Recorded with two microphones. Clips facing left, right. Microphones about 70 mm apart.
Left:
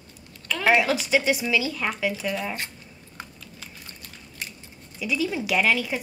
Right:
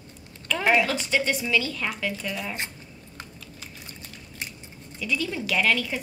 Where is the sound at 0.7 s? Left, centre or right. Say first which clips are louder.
Left 2 dB; centre.